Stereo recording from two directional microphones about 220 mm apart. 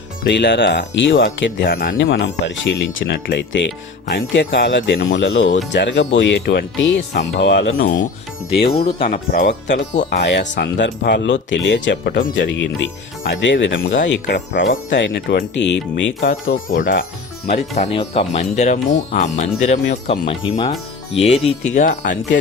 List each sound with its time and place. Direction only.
0.3 s speech: 50° left (ahead or behind)
2.0 s speech: 55° left (ahead or behind)
8.5 s speech: 25° left (ahead or behind); by 9.7 s 45° left (ahead or behind)
9.7 s speech: 35° left (ahead or behind)
10.2 s speech: 50° left (ahead or behind)
14.1 s speech: 50° left (ahead or behind)
16.7 s speech: 40° left (ahead or behind)